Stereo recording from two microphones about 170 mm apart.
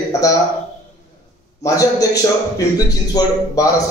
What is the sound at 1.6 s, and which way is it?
Speech, 20° left (ahead or behind).